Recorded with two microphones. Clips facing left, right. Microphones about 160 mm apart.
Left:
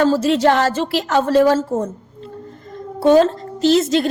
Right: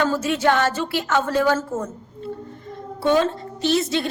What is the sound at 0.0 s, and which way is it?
A woman's voice, 35° left (ahead or behind).